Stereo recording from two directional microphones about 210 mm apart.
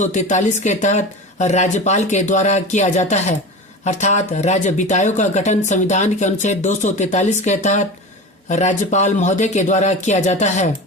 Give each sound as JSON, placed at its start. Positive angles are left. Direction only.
{"t": 0.0, "sound": "speech", "side_deg": 35}